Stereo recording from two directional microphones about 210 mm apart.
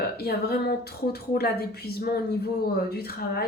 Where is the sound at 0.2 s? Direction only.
50° left (ahead or behind).